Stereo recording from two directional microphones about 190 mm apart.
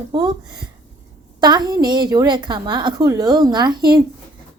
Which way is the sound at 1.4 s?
20° right (ahead or behind).